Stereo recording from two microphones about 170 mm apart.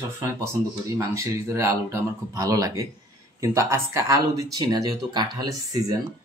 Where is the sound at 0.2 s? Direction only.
15° right (ahead or behind).